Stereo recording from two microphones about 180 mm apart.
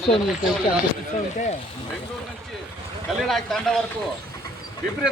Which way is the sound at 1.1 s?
45° left (ahead or behind).